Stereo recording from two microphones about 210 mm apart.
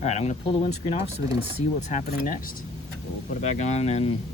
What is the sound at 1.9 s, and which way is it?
Speech, 40° left (ahead or behind).